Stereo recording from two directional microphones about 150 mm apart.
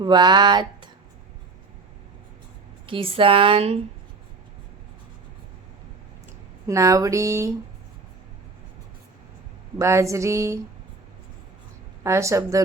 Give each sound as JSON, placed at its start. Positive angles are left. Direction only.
{"t": 0.0, "sound": "speech", "side_deg": -30}
{"t": 2.8, "sound": "speech", "side_deg": -35}
{"t": 6.7, "sound": "speech", "side_deg": -20}
{"t": 9.7, "sound": "speech", "side_deg": -20}
{"t": 12.0, "sound": "speech", "side_deg": -20}